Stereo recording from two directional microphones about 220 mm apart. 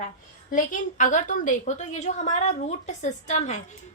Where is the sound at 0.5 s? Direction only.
35° left (ahead or behind).